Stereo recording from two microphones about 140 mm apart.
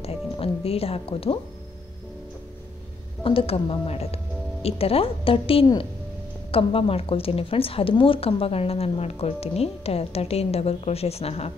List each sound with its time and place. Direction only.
0.0 s music: 45° left (ahead or behind)
3.3 s a woman's voice: 40° left (ahead or behind)